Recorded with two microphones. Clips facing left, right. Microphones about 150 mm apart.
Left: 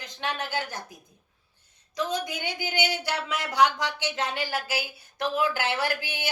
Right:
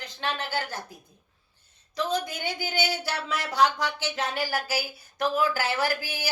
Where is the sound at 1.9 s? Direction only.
20° left (ahead or behind).